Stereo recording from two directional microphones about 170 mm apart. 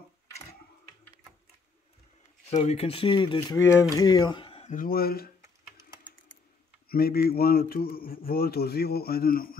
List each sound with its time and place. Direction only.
2.5 s speech: 40° left (ahead or behind)
4.6 s speech: 55° left (ahead or behind)
6.9 s speech: 65° left (ahead or behind)